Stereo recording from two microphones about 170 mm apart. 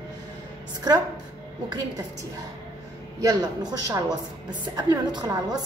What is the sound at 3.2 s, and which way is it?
A woman's voice, 25° right (ahead or behind).